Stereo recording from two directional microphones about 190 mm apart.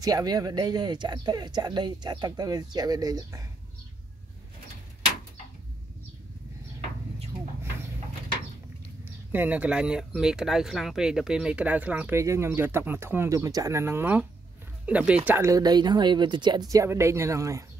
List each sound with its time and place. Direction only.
0.0 s speech: 20° right (ahead or behind)
9.3 s speech: 10° right (ahead or behind)